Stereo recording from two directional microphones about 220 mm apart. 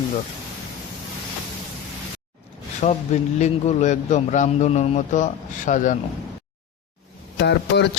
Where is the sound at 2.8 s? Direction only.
30° left (ahead or behind).